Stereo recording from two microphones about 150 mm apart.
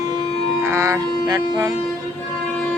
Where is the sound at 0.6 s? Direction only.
20° right (ahead or behind).